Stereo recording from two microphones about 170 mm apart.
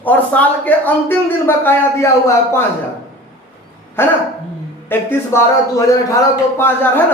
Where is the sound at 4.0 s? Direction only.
15° left (ahead or behind).